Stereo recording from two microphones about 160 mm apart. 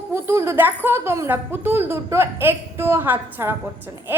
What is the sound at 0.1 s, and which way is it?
A child's voice, 15° right (ahead or behind).